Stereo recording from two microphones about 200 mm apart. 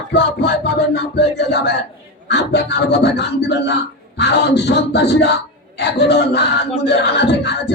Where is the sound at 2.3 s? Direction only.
55° left (ahead or behind).